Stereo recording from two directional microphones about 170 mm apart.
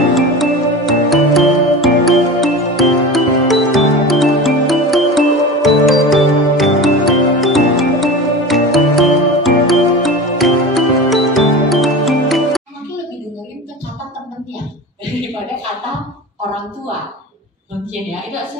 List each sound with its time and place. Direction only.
0.1 s music: centre (ahead or behind)